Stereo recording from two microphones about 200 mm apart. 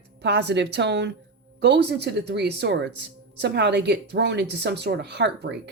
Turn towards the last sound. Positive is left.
turn(degrees=-55)  # may be behind; listen again after turning